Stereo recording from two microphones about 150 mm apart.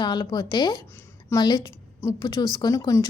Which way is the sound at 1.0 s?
25° left (ahead or behind).